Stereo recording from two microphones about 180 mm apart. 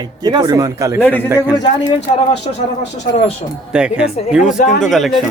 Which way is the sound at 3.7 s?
5° right (ahead or behind).